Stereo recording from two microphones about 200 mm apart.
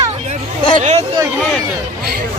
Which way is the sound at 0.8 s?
35° right (ahead or behind).